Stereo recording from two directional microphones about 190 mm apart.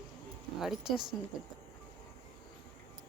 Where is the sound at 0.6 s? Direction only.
Centre (ahead or behind).